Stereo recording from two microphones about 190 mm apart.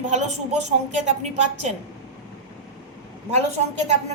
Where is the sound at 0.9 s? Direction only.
35° right (ahead or behind).